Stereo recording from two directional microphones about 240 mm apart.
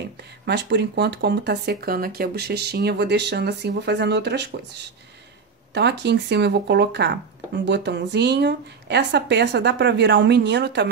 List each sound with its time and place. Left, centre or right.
0.2 s speech: right
5.7 s speech: right